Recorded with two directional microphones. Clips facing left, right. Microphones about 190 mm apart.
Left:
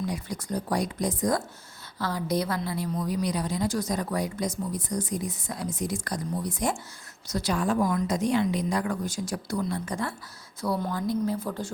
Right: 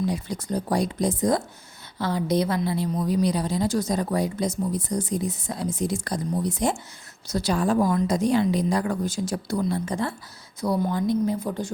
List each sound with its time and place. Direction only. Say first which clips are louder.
0.0 s a woman's voice: right 5 dB; 25° right (ahead or behind)